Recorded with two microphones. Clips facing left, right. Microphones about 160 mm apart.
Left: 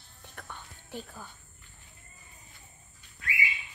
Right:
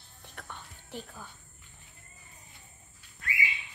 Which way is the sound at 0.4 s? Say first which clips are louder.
Even; centre (ahead or behind).